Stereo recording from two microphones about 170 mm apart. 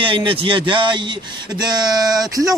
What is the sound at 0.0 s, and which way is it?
Speech, 30° right (ahead or behind).